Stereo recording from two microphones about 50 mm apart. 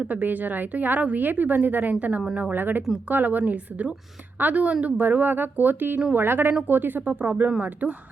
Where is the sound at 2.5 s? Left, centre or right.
Right.